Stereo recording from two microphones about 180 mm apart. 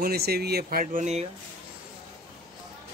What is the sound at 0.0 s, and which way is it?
Speech, 60° right (ahead or behind).